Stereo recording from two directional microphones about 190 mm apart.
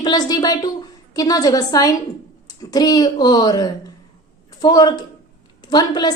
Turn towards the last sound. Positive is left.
turn(degrees=20)  # may be behind; listen again after turning